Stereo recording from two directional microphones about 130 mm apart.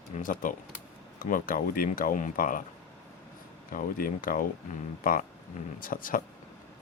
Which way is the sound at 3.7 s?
90° left.